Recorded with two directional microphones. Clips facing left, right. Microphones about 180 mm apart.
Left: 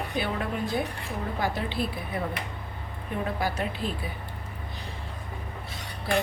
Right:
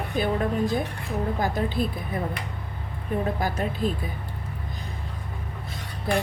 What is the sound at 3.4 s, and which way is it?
Speech, 45° right (ahead or behind).